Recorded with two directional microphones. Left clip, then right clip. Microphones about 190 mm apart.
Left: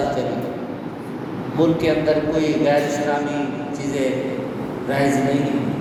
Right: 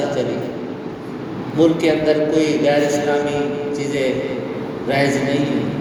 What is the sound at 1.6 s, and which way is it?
A man's voice, 65° right (ahead or behind).